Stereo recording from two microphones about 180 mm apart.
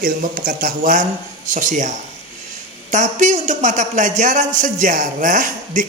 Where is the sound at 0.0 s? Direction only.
50° right (ahead or behind).